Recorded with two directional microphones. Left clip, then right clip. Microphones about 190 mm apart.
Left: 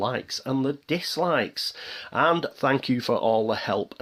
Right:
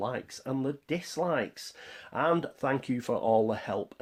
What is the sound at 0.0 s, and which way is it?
Speech, 25° left (ahead or behind).